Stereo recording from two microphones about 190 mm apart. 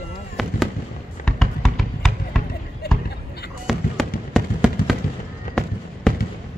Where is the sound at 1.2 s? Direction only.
Centre (ahead or behind).